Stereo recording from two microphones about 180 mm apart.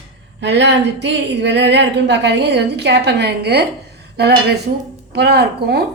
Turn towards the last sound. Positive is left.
turn(degrees=-65)  # may be behind; listen again after turning